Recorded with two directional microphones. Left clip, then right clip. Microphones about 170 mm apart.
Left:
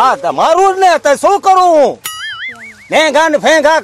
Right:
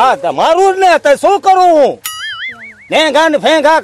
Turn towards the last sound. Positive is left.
turn(degrees=-15)  # may be behind; listen again after turning